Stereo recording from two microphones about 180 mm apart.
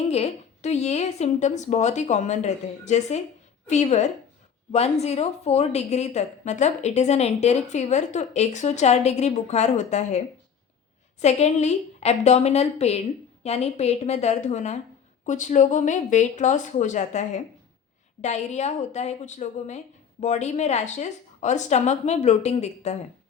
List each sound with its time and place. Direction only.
0.1 s a woman's voice: 35° left (ahead or behind)